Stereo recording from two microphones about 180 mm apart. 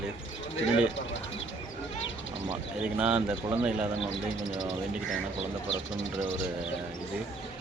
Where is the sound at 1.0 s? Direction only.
90° left.